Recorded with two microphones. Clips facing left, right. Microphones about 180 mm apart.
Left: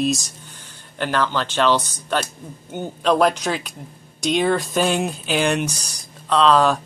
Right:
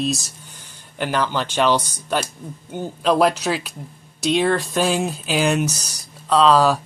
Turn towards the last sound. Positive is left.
turn(degrees=-5)  # may be behind; listen again after turning